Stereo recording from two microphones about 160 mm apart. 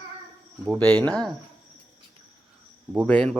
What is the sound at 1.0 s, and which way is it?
Speech, 5° left (ahead or behind).